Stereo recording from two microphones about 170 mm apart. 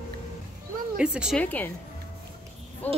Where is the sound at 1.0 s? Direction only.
5° right (ahead or behind).